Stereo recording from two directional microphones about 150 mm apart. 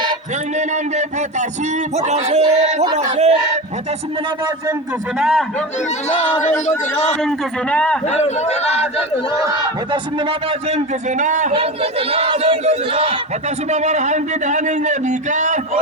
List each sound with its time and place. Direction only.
0.5 s speech: 50° right (ahead or behind)
5.1 s a man's voice: centre (ahead or behind)
6.1 s speech: 50° left (ahead or behind)
7.2 s speech: 5° left (ahead or behind)
8.0 s speech: 45° left (ahead or behind)
9.4 s speech: 30° right (ahead or behind); by 11.5 s 55° right (ahead or behind)
11.5 s speech: 40° right (ahead or behind)